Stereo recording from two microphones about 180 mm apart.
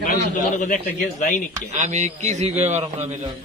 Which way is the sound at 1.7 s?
40° right (ahead or behind).